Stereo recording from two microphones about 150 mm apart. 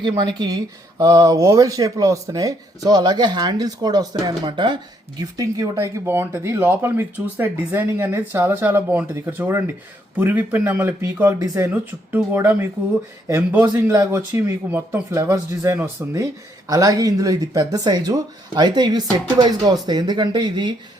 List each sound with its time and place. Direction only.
0.0 s speech: 30° right (ahead or behind)